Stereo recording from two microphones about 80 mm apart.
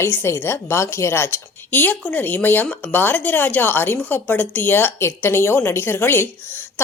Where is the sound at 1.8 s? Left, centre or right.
Centre.